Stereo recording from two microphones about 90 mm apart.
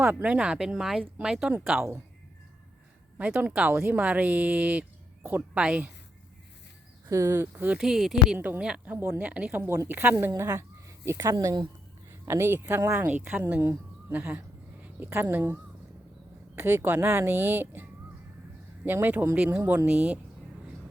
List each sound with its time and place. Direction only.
0.1 s speech: 15° right (ahead or behind)
3.2 s speech: 15° right (ahead or behind)
7.1 s speech: 30° right (ahead or behind)
7.8 s speech: 5° right (ahead or behind)
9.6 s a woman's voice: 30° right (ahead or behind)
16.6 s speech: 20° right (ahead or behind)
18.9 s speech: 20° right (ahead or behind)